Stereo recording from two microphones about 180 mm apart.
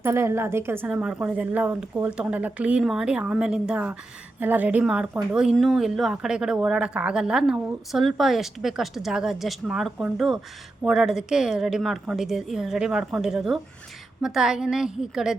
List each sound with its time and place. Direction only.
0.0 s speech: 15° right (ahead or behind)